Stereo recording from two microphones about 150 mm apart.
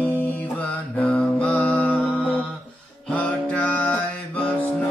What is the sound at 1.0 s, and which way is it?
Mantra, 10° left (ahead or behind).